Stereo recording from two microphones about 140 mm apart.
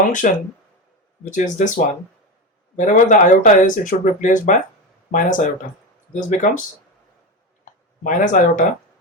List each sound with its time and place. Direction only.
0.0 s speech: 65° left (ahead or behind)
1.5 s speech: 60° left (ahead or behind)
7.6 s a sound: 70° left (ahead or behind)